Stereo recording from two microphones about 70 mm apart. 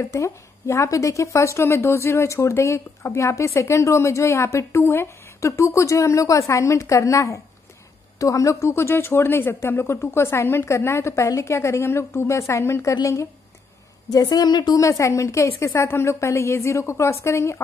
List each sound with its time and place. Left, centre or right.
0.1 s a woman's voice: left
14.1 s a woman's voice: left
14.8 s speech: left